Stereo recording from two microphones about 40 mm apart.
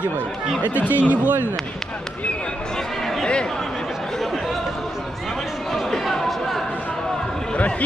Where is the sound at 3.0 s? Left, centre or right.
Centre.